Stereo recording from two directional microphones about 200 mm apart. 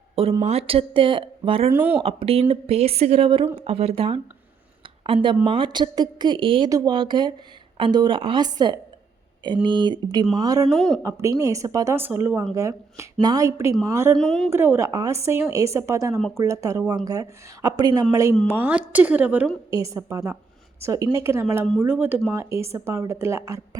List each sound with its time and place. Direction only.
0.2 s speech: 30° right (ahead or behind)
1.7 s speech: 10° right (ahead or behind)
2.0 s speech: 30° right (ahead or behind)
10.7 s speech: centre (ahead or behind)
11.0 s speech: 15° right (ahead or behind)
14.2 s speech: centre (ahead or behind)
14.5 s speech: 10° right (ahead or behind)
16.1 s speech: centre (ahead or behind)
16.4 s speech: 15° right (ahead or behind)